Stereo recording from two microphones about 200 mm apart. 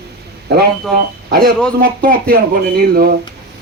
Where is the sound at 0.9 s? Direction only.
50° right (ahead or behind).